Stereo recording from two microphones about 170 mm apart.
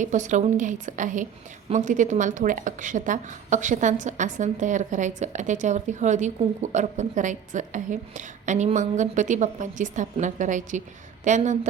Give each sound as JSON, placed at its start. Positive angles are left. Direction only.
{"t": 0.0, "sound": "a woman's voice", "side_deg": -45}